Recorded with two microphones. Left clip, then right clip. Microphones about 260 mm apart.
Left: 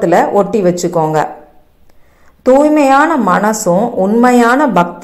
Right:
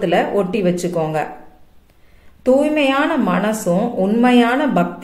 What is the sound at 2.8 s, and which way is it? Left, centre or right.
A woman's voice, centre.